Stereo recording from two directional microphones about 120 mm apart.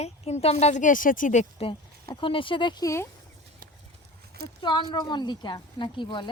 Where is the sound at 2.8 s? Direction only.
25° left (ahead or behind).